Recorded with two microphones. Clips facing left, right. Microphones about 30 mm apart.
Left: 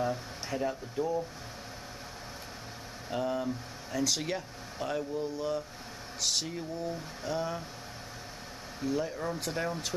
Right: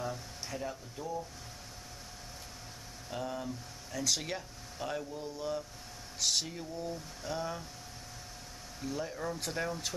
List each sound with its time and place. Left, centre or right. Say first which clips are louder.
0.0 s speech: left 6 dB; left
3.1 s speech: left 6 dB; centre
8.8 s speech: left 5 dB; centre